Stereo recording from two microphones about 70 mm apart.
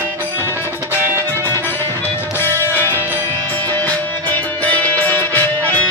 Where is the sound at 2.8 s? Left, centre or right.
Left.